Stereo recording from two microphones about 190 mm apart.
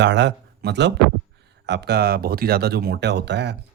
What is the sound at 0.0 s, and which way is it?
Speech, 65° right (ahead or behind).